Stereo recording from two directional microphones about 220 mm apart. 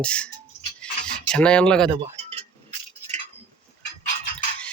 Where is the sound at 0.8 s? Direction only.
5° left (ahead or behind).